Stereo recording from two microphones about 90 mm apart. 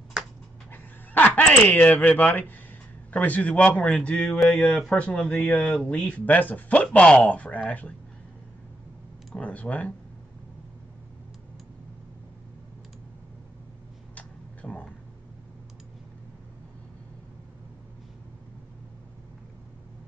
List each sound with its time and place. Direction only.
0.7 s speech: 20° left (ahead or behind)
9.3 s speech: 15° left (ahead or behind)
14.1 s a sound: 15° left (ahead or behind)